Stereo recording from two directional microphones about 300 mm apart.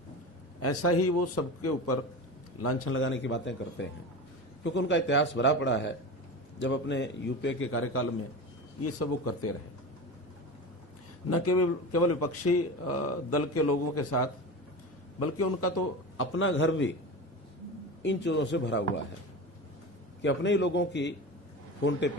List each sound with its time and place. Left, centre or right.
0.6 s a man's voice: left
11.3 s a man's voice: left
18.0 s a man's voice: left
20.2 s a man's voice: left